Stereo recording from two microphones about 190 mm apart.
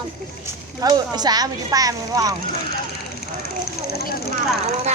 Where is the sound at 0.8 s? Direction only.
20° right (ahead or behind).